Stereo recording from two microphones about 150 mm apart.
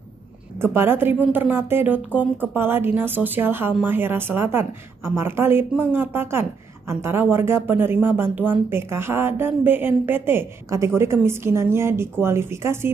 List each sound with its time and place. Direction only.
0.6 s speech: 15° right (ahead or behind)